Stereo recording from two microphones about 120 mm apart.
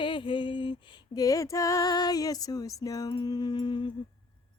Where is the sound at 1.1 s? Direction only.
30° left (ahead or behind).